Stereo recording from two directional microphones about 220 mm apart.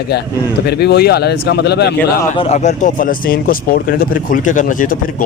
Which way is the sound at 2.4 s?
30° left (ahead or behind).